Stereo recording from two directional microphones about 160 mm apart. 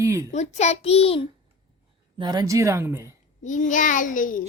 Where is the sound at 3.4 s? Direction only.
50° left (ahead or behind).